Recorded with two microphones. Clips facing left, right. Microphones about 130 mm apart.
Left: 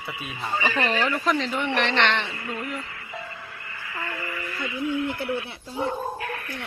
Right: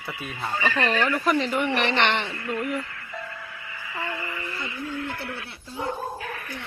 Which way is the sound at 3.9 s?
20° right (ahead or behind).